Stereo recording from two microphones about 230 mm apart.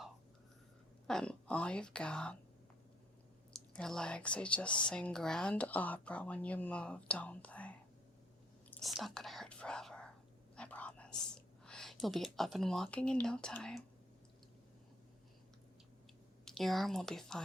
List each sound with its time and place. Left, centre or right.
1.0 s speech: centre
3.7 s speech: centre
10.5 s whispering: centre
11.3 s speech: centre
16.5 s speech: centre